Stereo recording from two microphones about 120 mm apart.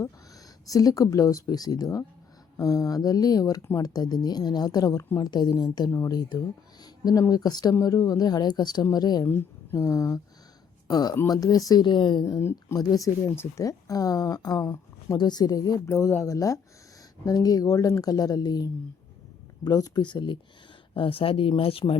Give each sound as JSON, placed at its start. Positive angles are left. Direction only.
{"t": 0.7, "sound": "a woman's voice", "side_deg": 30}
{"t": 9.2, "sound": "a woman's voice", "side_deg": 20}
{"t": 12.2, "sound": "a woman's voice", "side_deg": 25}